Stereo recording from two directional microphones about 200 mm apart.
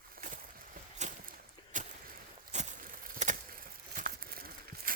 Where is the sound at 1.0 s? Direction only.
35° right (ahead or behind).